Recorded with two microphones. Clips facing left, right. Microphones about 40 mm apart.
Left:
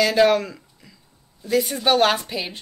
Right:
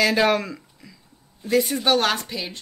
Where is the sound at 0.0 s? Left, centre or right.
Centre.